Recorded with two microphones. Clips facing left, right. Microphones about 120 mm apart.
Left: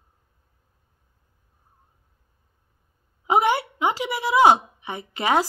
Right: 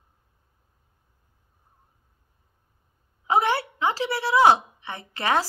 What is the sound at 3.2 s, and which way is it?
A woman's voice, 15° left (ahead or behind).